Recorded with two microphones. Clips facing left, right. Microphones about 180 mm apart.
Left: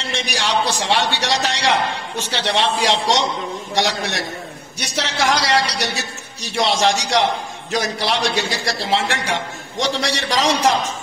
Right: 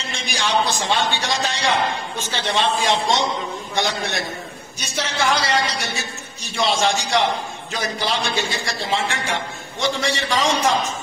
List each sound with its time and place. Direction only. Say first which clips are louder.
0.3 s a man's voice: even; 70° left (ahead or behind)